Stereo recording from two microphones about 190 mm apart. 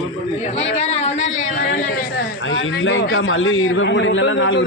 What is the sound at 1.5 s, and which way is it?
Speech, 50° left (ahead or behind).